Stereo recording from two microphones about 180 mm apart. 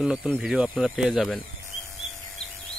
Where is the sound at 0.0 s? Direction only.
5° right (ahead or behind).